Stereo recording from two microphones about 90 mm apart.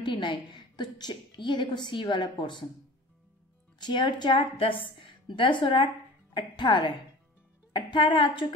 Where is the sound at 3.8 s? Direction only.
55° left (ahead or behind).